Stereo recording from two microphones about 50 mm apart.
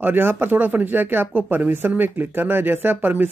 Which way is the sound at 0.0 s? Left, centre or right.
Right.